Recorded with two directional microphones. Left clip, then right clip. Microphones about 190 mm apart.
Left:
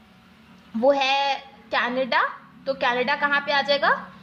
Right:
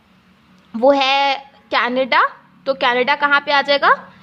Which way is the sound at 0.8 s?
40° right (ahead or behind).